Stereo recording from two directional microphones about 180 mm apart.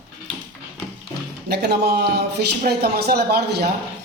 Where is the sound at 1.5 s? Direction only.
65° right (ahead or behind).